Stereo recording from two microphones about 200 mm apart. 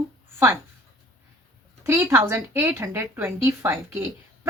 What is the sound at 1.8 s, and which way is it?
Speech, 10° right (ahead or behind).